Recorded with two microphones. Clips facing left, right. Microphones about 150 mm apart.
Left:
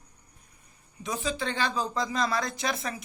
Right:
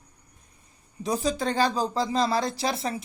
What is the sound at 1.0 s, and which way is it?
Speech, 35° right (ahead or behind).